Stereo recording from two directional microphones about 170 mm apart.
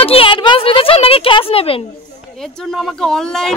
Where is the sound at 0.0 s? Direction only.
35° left (ahead or behind).